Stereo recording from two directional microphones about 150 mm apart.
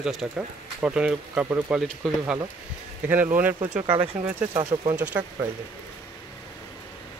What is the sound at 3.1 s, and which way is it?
Speech, 10° right (ahead or behind).